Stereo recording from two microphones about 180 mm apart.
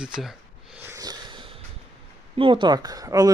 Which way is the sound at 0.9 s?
20° right (ahead or behind).